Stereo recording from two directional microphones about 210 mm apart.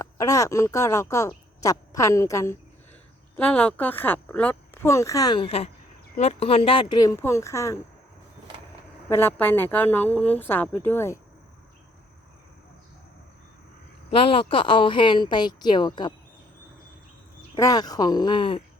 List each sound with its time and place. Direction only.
0.0 s speech: 15° left (ahead or behind)
9.0 s speech: 10° left (ahead or behind)
14.1 s speech: 25° left (ahead or behind)
17.5 s speech: 20° left (ahead or behind)